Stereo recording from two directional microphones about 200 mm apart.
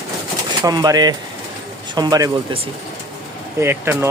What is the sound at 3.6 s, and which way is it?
Speech, 10° right (ahead or behind).